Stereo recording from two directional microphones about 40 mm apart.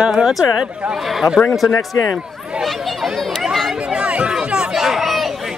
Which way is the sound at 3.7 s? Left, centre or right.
Right.